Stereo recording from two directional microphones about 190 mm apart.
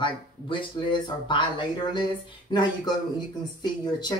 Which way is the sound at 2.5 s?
25° left (ahead or behind).